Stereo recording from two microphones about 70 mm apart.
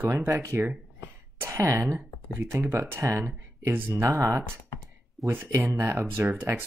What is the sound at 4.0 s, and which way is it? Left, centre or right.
Speech, right.